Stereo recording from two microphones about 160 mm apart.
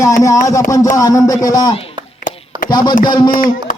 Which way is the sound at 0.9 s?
20° left (ahead or behind).